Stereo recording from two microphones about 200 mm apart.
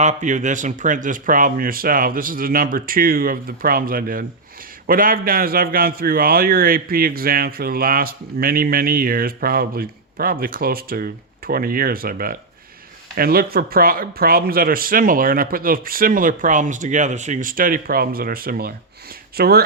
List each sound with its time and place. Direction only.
0.0 s a man's voice: 35° right (ahead or behind)